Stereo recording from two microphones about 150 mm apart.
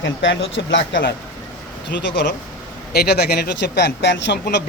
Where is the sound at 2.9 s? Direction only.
90° left.